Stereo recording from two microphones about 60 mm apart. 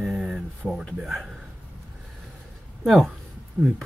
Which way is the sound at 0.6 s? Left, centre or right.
Centre.